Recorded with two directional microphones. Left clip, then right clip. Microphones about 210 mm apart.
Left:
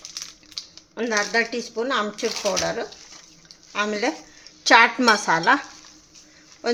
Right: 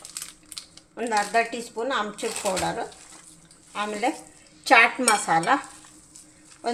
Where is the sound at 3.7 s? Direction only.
35° left (ahead or behind).